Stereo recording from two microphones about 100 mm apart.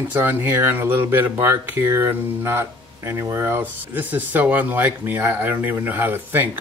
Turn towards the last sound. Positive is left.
turn(degrees=-20)  # may be behind; listen again after turning